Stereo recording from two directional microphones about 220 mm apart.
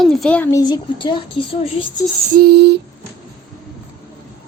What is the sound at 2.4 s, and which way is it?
Speech, 45° right (ahead or behind).